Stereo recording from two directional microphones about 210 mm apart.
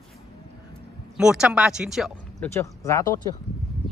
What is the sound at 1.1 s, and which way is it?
Speech, 5° right (ahead or behind).